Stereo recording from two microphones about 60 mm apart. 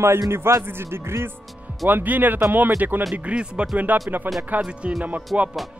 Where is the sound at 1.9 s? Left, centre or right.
Right.